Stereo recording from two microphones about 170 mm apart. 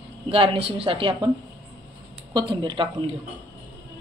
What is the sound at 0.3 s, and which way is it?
A woman's voice, 35° right (ahead or behind).